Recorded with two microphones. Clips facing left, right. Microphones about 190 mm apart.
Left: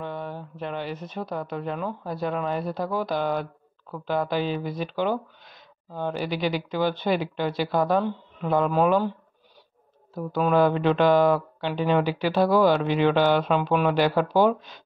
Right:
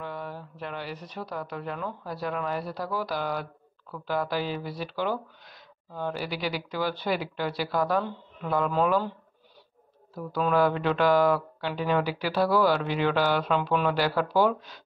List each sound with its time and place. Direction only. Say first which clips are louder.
0.0 s speech: left 3 dB; 25° left (ahead or behind)
10.1 s speech: left 3 dB; 20° left (ahead or behind)